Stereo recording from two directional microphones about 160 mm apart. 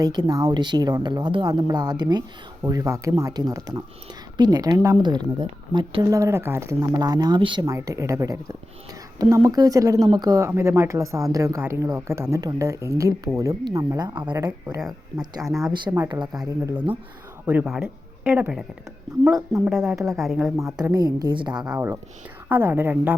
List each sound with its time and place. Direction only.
0.0 s speech: 25° right (ahead or behind)
15.4 s a woman's voice: 10° right (ahead or behind)
15.8 s speech: 30° right (ahead or behind)
17.4 s speech: 10° right (ahead or behind)
19.6 s speech: 5° right (ahead or behind)
20.7 s speech: 25° right (ahead or behind)
22.4 s a woman's voice: 15° right (ahead or behind)